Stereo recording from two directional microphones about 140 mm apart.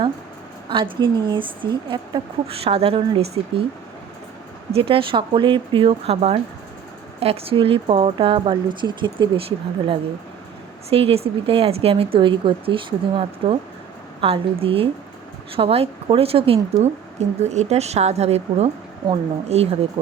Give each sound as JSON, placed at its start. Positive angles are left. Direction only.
{"t": 0.7, "sound": "a woman's voice", "side_deg": -35}
{"t": 4.7, "sound": "a woman's voice", "side_deg": -40}